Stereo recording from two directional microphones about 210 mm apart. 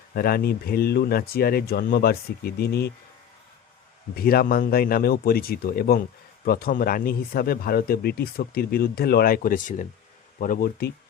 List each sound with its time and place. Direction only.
0.1 s speech: 45° left (ahead or behind)
4.1 s speech: 45° left (ahead or behind)